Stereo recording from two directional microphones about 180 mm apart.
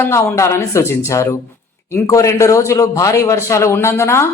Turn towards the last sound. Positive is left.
turn(degrees=15)  # may be behind; listen again after turning